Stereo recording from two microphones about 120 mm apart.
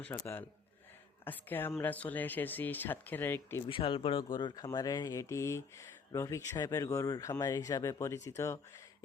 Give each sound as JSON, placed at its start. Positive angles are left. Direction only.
{"t": 0.0, "sound": "speech", "side_deg": 15}
{"t": 3.7, "sound": "speech", "side_deg": 45}